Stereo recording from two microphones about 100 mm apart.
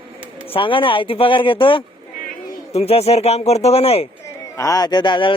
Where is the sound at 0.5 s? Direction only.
60° left (ahead or behind).